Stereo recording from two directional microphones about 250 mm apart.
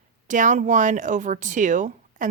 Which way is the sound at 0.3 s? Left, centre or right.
Right.